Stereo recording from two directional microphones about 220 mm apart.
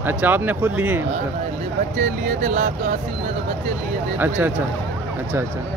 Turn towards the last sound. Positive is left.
turn(degrees=-5)  # may be behind; listen again after turning